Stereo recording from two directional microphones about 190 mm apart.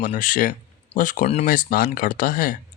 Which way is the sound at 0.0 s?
45° left (ahead or behind).